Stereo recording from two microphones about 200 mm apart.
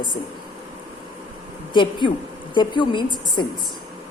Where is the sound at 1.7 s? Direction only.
25° left (ahead or behind).